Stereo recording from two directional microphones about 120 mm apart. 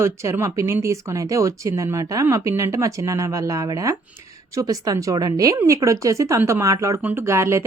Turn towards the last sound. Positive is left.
turn(degrees=-20)  # may be behind; listen again after turning